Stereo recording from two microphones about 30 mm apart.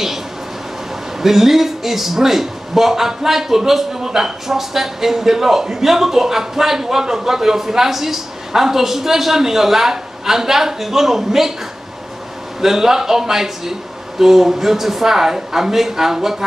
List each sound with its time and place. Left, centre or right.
1.2 s speech: centre
12.5 s speech: centre